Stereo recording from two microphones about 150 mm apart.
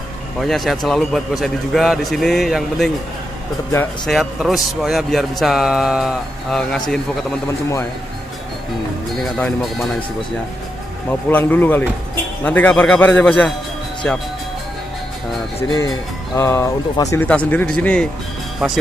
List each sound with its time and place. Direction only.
0.4 s a man's voice: centre (ahead or behind)
4.0 s a man's voice: centre (ahead or behind)
9.2 s a man's voice: centre (ahead or behind)
11.1 s speech: 10° left (ahead or behind)
16.3 s speech: 15° left (ahead or behind)
17.3 s speech: 10° left (ahead or behind)